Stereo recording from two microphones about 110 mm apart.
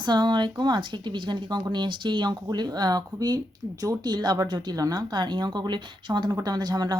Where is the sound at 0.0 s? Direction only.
40° right (ahead or behind).